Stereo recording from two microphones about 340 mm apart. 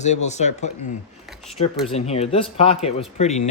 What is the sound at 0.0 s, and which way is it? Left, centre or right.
Speech, centre.